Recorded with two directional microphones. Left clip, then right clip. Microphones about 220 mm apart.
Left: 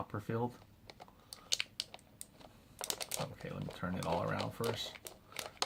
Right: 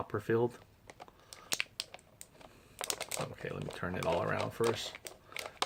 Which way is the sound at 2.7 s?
Centre (ahead or behind).